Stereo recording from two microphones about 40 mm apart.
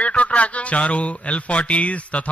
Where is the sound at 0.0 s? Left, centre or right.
Left.